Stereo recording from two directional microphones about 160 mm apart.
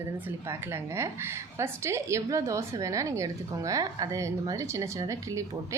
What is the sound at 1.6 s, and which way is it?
A woman's voice, 15° right (ahead or behind).